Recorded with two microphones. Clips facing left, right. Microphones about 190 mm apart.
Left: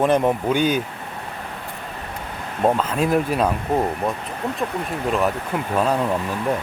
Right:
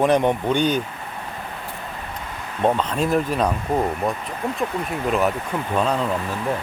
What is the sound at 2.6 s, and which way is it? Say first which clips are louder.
Speech: left 1 dB; 5° left (ahead or behind).